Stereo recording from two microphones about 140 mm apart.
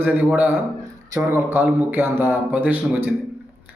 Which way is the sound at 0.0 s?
10° right (ahead or behind).